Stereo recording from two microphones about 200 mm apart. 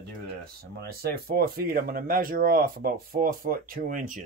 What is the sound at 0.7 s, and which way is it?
Speech, 50° right (ahead or behind).